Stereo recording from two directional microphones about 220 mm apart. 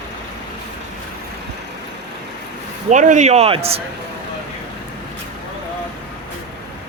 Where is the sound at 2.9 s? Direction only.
35° right (ahead or behind).